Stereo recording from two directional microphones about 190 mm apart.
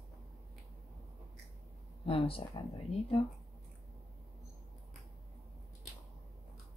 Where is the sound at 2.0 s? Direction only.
30° left (ahead or behind).